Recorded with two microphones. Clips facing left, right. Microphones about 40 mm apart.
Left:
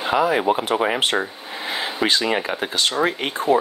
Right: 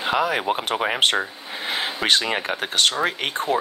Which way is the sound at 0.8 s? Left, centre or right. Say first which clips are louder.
Even; right.